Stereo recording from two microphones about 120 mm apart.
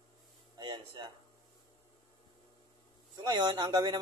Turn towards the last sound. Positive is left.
turn(degrees=-35)  # may be behind; listen again after turning